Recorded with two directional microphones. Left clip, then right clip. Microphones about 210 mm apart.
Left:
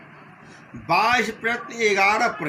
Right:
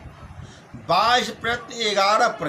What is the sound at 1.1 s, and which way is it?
Speech, 15° right (ahead or behind).